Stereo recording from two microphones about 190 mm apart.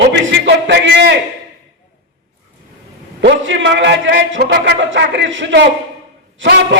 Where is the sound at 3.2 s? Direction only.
75° right (ahead or behind).